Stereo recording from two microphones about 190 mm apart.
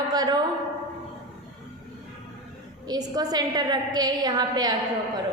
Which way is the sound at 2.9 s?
20° right (ahead or behind).